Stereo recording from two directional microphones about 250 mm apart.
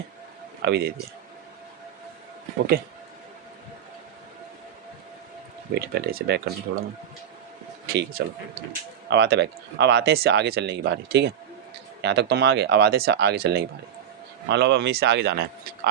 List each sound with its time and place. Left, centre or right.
0.6 s a man's voice: right
5.7 s speech: right
7.9 s speech: right